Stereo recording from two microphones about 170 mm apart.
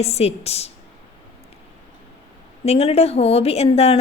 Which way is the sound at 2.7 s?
35° left (ahead or behind).